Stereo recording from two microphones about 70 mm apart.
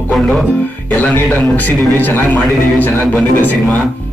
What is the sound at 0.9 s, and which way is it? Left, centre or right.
A man's voice, left.